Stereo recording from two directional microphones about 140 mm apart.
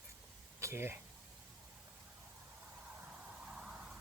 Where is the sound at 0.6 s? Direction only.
20° right (ahead or behind).